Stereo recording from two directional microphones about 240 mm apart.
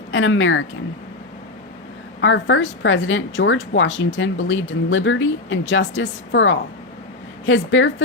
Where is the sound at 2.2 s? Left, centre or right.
Left.